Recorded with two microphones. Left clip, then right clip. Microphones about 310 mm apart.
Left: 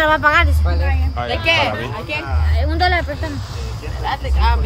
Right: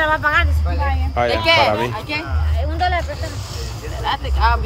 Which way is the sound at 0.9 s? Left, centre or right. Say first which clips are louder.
Right 6 dB; centre.